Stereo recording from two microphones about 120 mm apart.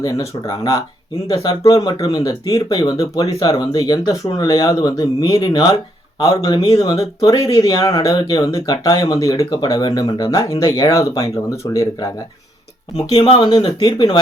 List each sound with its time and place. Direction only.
0.4 s speech: 30° left (ahead or behind)
13.1 s speech: 40° left (ahead or behind)